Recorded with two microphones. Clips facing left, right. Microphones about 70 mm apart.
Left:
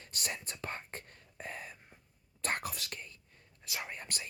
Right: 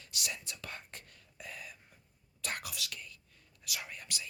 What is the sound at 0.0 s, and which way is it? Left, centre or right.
Whispering, left.